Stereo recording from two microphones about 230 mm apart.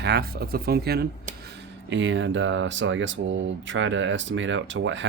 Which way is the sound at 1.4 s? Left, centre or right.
Right.